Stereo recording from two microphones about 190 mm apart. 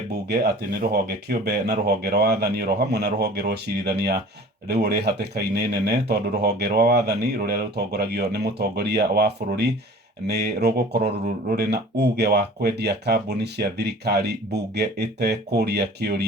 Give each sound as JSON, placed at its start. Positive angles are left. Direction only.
{"t": 0.3, "sound": "speech", "side_deg": -55}